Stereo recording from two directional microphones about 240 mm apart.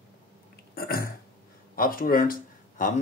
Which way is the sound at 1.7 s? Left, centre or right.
Left.